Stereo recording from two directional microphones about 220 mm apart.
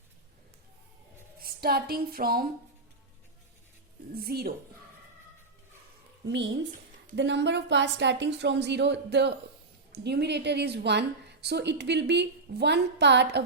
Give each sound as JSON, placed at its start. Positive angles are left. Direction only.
{"t": 1.4, "sound": "speech", "side_deg": -45}
{"t": 4.1, "sound": "a woman's voice", "side_deg": -45}
{"t": 6.2, "sound": "a woman's voice", "side_deg": -50}